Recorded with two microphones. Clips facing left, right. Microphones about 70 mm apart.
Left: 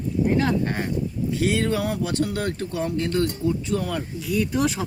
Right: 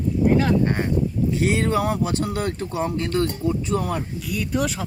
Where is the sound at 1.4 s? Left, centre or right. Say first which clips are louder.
Right 1 dB; right.